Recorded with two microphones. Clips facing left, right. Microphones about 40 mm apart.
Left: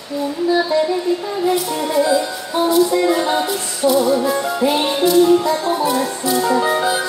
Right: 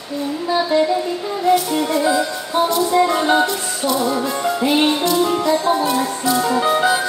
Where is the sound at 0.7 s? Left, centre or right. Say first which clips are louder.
Right 5 dB; right.